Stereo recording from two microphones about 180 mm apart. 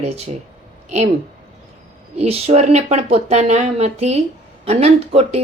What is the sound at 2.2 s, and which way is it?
A woman's voice, 35° right (ahead or behind).